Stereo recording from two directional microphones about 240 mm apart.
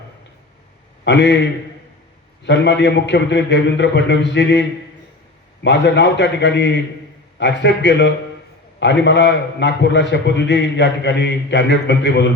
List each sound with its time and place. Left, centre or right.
1.0 s a man's voice: left
5.6 s a man's voice: left